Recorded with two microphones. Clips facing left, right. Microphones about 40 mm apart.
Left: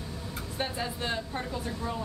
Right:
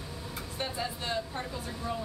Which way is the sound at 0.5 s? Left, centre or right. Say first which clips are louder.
Left 2 dB; centre.